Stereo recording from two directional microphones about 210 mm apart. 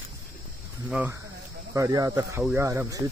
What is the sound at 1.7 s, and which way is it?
Speech, 15° right (ahead or behind).